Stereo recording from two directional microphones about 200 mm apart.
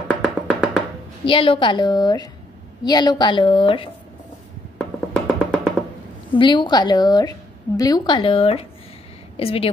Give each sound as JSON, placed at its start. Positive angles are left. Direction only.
{"t": 0.1, "sound": "music", "side_deg": 0}
{"t": 1.2, "sound": "a woman's voice", "side_deg": 25}
{"t": 4.7, "sound": "music", "side_deg": 5}
{"t": 6.3, "sound": "a woman's voice", "side_deg": 25}